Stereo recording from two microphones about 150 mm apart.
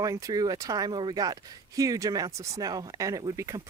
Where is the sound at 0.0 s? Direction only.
20° right (ahead or behind).